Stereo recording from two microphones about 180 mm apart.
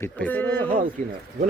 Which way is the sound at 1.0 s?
45° right (ahead or behind).